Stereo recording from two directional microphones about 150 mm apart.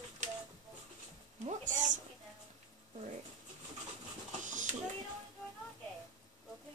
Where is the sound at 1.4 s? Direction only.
50° right (ahead or behind).